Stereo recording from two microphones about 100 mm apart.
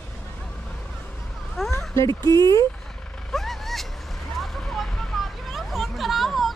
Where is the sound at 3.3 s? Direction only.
5° left (ahead or behind).